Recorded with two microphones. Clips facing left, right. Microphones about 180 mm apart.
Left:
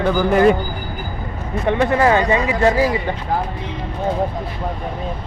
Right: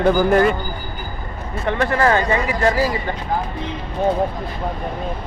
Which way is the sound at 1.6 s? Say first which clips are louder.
Left 2 dB; 20° left (ahead or behind).